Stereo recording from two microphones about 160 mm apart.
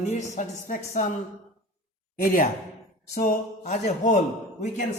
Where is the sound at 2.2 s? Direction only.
55° left (ahead or behind).